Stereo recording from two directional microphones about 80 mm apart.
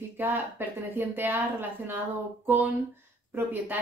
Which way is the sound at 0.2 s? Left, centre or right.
Right.